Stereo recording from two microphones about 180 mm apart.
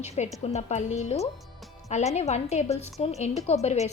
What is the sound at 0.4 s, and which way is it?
Speech, 40° left (ahead or behind).